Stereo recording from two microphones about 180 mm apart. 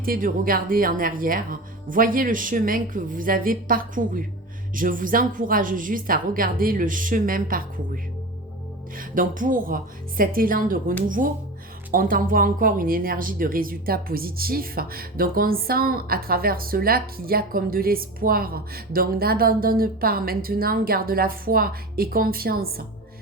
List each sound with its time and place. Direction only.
0.0 s speech: 50° right (ahead or behind)
9.0 s speech: 50° right (ahead or behind)